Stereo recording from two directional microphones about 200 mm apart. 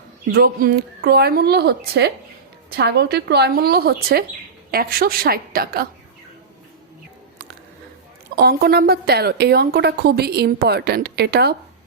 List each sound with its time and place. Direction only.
0.3 s a woman's voice: 45° right (ahead or behind)
8.4 s a woman's voice: 50° right (ahead or behind)